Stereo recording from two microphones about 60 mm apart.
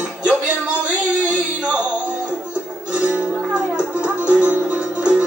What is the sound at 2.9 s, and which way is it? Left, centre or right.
Music, right.